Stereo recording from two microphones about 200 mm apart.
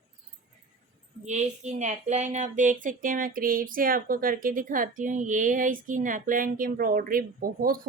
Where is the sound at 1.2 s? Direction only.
35° right (ahead or behind).